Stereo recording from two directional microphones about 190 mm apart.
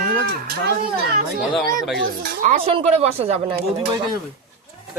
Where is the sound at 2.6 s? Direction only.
35° right (ahead or behind).